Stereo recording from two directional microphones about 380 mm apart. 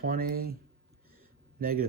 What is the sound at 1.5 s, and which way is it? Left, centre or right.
Speech, right.